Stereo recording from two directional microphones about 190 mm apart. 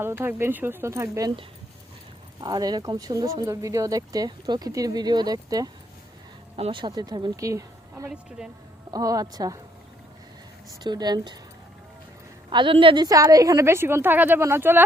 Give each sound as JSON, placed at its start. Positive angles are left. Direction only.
{"t": 0.0, "sound": "a woman's voice", "side_deg": -10}
{"t": 2.4, "sound": "speech", "side_deg": -20}
{"t": 8.4, "sound": "a woman's voice", "side_deg": -5}
{"t": 8.9, "sound": "speech", "side_deg": -20}
{"t": 10.8, "sound": "speech", "side_deg": -20}
{"t": 12.5, "sound": "a woman's voice", "side_deg": -25}